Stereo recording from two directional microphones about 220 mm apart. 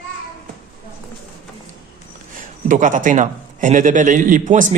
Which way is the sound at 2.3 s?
35° right (ahead or behind).